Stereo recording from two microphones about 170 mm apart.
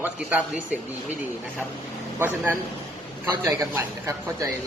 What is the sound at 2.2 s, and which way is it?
Speech, 15° right (ahead or behind).